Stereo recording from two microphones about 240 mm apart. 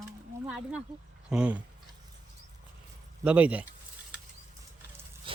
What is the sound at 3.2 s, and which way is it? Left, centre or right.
Speech, centre.